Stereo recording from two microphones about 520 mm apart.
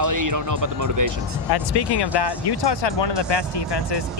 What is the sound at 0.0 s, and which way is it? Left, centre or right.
Speech, right.